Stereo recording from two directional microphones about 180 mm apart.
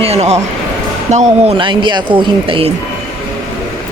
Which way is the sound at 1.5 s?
25° right (ahead or behind).